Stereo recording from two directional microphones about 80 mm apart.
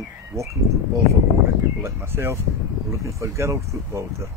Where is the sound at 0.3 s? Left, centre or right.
Right.